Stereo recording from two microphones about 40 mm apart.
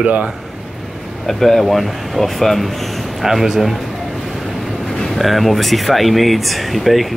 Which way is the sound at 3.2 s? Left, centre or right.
Centre.